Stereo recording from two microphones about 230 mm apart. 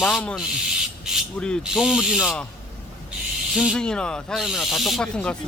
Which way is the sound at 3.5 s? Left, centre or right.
Centre.